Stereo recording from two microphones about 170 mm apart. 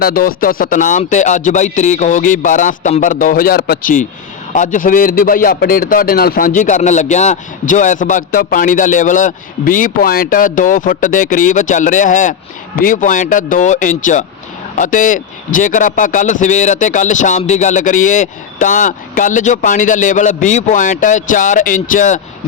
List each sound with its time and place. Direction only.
0.0 s a man's voice: 60° left (ahead or behind)